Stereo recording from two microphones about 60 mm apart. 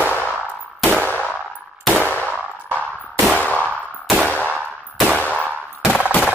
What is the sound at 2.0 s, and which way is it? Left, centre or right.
Gunshot, left.